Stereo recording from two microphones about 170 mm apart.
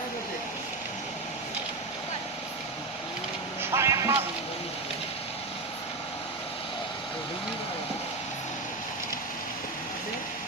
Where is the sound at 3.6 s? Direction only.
15° right (ahead or behind).